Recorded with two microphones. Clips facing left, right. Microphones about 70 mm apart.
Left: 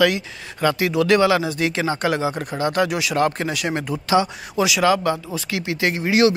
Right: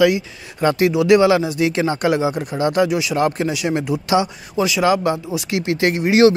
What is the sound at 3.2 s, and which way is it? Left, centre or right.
Speech, centre.